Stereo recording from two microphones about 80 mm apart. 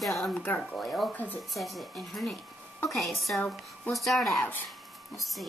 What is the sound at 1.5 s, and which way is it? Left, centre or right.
Speech, centre.